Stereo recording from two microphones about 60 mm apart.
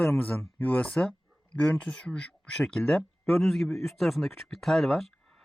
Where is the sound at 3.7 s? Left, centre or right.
Left.